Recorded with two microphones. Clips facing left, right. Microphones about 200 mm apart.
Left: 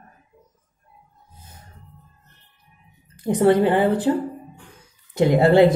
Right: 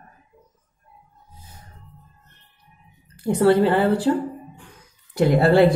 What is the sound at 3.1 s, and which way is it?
A woman's voice, 20° left (ahead or behind).